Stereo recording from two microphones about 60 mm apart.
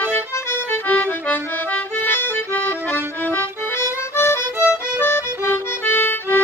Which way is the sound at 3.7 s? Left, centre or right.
Left.